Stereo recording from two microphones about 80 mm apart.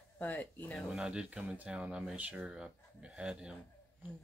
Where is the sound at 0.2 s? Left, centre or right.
Left.